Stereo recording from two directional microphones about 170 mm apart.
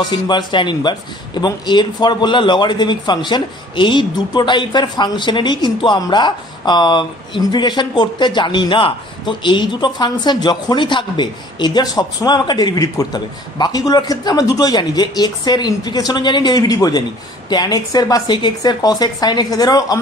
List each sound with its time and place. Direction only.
0.1 s speech: 25° left (ahead or behind)